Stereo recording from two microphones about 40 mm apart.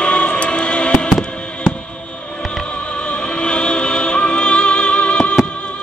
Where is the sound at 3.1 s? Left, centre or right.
Left.